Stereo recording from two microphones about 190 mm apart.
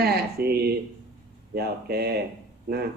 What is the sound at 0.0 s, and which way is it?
Speech, 55° right (ahead or behind).